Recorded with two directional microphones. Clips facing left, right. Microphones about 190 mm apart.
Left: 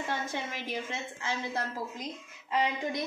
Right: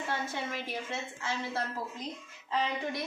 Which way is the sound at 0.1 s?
15° left (ahead or behind).